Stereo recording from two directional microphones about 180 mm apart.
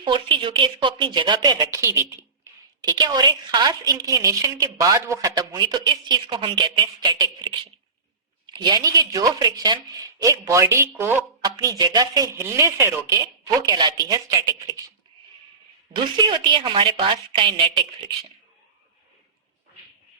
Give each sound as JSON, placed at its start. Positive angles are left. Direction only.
{"t": 0.0, "sound": "a woman's voice", "side_deg": -30}
{"t": 16.0, "sound": "a woman's voice", "side_deg": -25}